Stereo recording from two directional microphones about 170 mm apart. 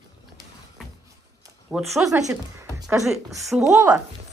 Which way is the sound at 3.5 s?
5° right (ahead or behind).